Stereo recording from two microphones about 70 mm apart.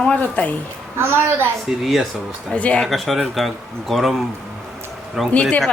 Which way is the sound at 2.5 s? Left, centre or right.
Centre.